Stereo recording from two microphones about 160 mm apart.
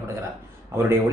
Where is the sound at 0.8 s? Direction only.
15° right (ahead or behind).